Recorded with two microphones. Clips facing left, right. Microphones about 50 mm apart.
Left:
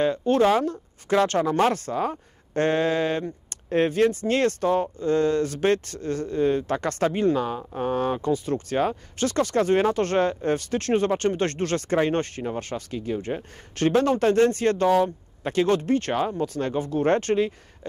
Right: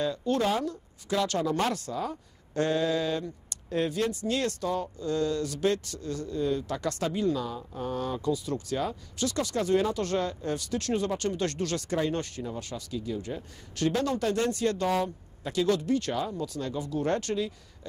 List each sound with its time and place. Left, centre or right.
0.0 s speech: left